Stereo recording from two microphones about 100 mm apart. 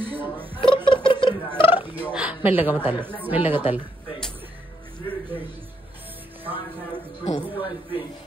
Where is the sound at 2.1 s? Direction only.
15° right (ahead or behind).